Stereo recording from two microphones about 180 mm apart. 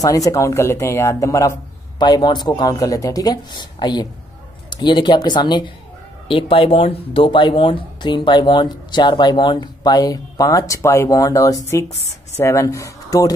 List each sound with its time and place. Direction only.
0.0 s speech: 20° left (ahead or behind)